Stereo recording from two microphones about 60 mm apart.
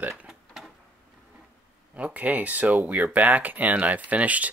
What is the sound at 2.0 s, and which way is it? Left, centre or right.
Speech, right.